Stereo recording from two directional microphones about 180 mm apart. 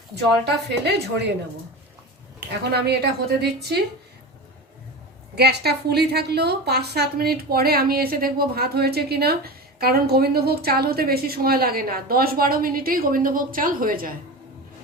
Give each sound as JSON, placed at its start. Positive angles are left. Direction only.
{"t": 0.4, "sound": "a woman's voice", "side_deg": -70}
{"t": 2.5, "sound": "a woman's voice", "side_deg": -65}
{"t": 5.3, "sound": "a woman's voice", "side_deg": -65}